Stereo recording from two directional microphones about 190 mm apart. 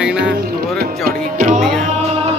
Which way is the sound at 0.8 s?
50° right (ahead or behind).